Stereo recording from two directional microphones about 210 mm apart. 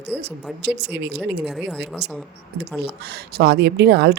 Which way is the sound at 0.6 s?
50° right (ahead or behind).